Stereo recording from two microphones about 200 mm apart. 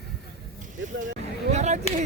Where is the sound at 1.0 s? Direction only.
35° right (ahead or behind).